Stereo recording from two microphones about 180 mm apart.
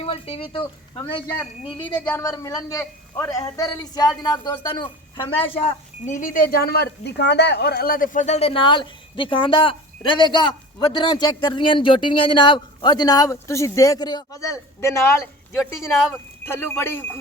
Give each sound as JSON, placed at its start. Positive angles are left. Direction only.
{"t": 0.0, "sound": "speech", "side_deg": 30}
{"t": 2.0, "sound": "speech", "side_deg": 10}
{"t": 2.3, "sound": "speech", "side_deg": 20}